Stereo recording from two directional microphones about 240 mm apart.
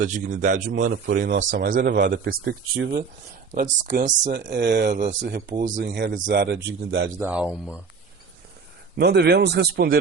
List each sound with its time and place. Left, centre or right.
0.0 s a man's voice: right
4.4 s a man's voice: right
7.2 s speech: centre
9.0 s a man's voice: right